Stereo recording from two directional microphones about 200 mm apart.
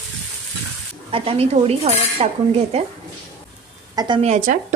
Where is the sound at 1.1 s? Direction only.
30° right (ahead or behind).